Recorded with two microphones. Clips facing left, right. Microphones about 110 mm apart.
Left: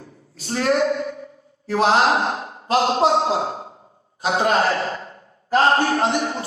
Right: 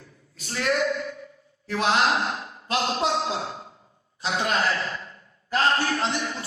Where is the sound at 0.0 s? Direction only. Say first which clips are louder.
Left 7 dB; 35° left (ahead or behind).